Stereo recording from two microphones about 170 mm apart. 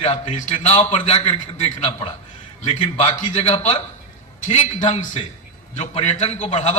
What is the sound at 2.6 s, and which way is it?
A man's voice, 45° left (ahead or behind).